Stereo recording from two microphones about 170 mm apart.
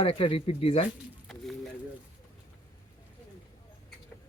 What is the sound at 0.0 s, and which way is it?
Speech, 35° left (ahead or behind).